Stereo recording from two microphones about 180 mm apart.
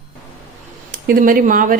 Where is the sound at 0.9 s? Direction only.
50° right (ahead or behind).